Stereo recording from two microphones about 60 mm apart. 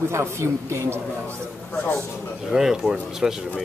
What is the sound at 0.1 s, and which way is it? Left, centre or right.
Speech, right.